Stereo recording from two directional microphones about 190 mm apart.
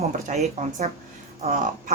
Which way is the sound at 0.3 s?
35° right (ahead or behind).